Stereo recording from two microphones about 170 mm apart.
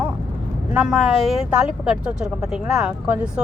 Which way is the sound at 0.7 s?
5° right (ahead or behind).